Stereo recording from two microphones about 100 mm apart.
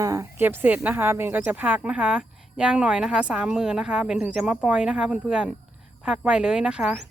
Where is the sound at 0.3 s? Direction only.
20° right (ahead or behind).